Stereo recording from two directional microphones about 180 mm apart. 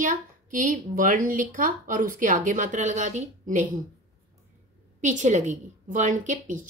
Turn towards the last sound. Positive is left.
turn(degrees=-45)  # may be behind; listen again after turning